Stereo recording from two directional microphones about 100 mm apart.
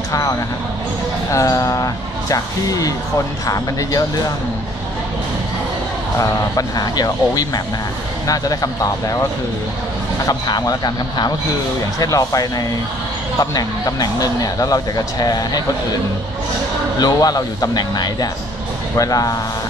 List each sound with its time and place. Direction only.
0.1 s a sound: 35° left (ahead or behind)
1.3 s speech: 35° left (ahead or behind)
6.1 s speech: 35° left (ahead or behind)
17.0 s speech: 40° left (ahead or behind)